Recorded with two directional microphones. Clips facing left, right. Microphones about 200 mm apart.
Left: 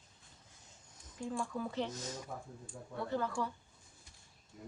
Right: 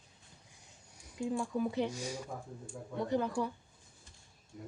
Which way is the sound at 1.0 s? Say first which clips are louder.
Right 5 dB; 10° right (ahead or behind).